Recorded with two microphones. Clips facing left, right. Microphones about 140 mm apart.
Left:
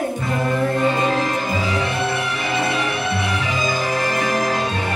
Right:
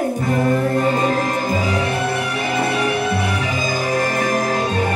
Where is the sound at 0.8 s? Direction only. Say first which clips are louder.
Right 1 dB; 45° right (ahead or behind).